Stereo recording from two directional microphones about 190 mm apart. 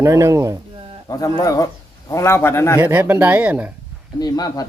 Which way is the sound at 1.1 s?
20° left (ahead or behind).